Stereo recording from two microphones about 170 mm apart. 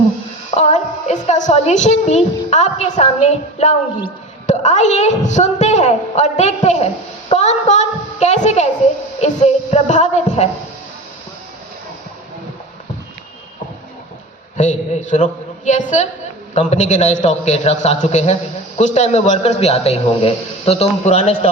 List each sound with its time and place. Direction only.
0.5 s a woman's voice: 40° left (ahead or behind)
14.6 s a man's voice: 45° left (ahead or behind)